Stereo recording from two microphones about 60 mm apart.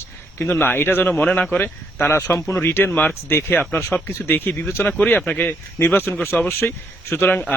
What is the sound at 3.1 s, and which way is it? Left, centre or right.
Speech, left.